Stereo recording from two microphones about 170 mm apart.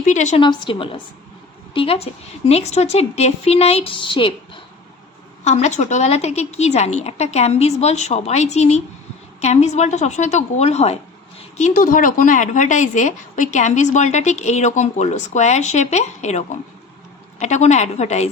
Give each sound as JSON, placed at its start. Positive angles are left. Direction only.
{"t": 0.0, "sound": "speech", "side_deg": 45}
{"t": 0.3, "sound": "a woman's voice", "side_deg": 30}
{"t": 5.5, "sound": "a woman's voice", "side_deg": 40}
{"t": 11.5, "sound": "speech", "side_deg": 50}
{"t": 17.4, "sound": "a woman's voice", "side_deg": 40}